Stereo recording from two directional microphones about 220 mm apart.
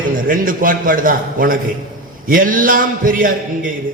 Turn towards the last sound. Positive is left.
turn(degrees=-40)  # may be behind; listen again after turning